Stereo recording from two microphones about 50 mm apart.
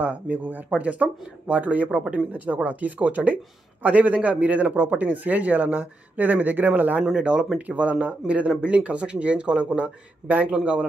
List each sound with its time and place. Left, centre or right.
0.0 s speech: right
7.2 s speech: right